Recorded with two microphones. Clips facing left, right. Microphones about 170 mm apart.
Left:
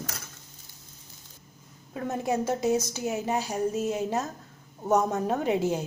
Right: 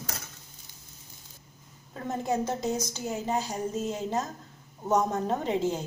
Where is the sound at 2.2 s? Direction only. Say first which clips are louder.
Left 3 dB; 10° left (ahead or behind).